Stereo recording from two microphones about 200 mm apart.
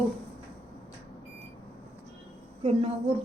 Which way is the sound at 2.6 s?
30° right (ahead or behind).